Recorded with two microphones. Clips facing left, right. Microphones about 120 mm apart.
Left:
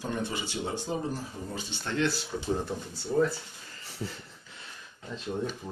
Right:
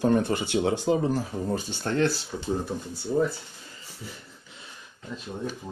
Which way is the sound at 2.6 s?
15° right (ahead or behind).